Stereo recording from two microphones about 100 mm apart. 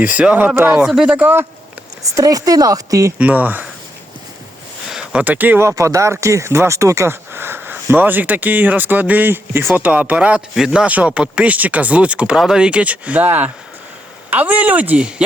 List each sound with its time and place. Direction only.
0.0 s speech: 15° right (ahead or behind)
0.7 s speech: 5° right (ahead or behind)
2.1 s speech: 35° right (ahead or behind)
3.2 s speech: 15° right (ahead or behind)
4.9 s a sound: 5° right (ahead or behind)
5.2 s speech: 15° right (ahead or behind)